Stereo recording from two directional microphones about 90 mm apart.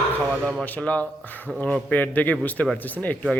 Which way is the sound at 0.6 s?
15° left (ahead or behind).